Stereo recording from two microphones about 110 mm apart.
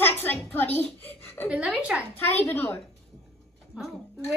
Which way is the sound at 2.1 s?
20° left (ahead or behind).